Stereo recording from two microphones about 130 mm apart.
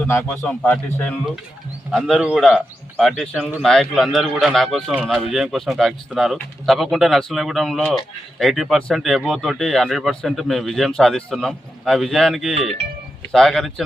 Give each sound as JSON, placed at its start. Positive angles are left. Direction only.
{"t": 0.1, "sound": "a man's voice", "side_deg": 20}
{"t": 1.9, "sound": "a man's voice", "side_deg": 0}